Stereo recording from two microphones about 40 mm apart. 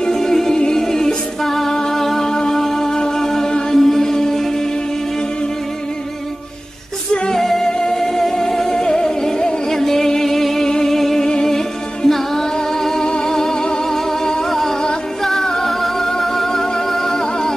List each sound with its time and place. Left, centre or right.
0.0 s music: centre
3.7 s chant: centre
7.3 s music: centre